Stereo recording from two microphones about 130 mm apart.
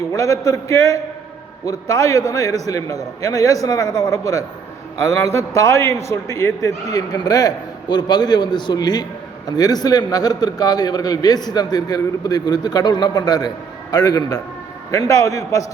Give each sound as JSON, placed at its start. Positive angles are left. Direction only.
{"t": 0.1, "sound": "a man's voice", "side_deg": 25}